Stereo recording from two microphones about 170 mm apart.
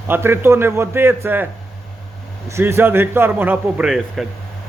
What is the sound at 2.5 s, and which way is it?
A man's voice, 15° right (ahead or behind).